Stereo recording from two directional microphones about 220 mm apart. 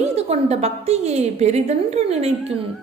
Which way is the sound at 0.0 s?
30° right (ahead or behind).